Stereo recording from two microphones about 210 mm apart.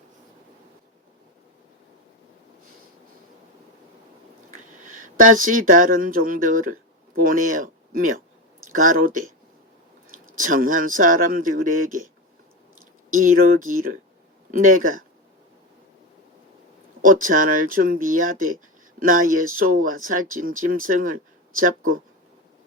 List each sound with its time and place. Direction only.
4.8 s speech: 40° right (ahead or behind)
10.3 s speech: 40° right (ahead or behind)
13.1 s speech: 40° right (ahead or behind)
17.0 s speech: 40° right (ahead or behind)